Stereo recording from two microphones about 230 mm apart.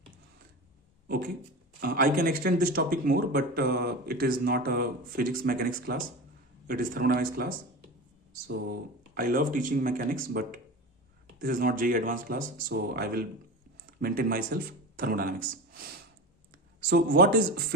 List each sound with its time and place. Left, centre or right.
1.0 s speech: right
16.8 s speech: right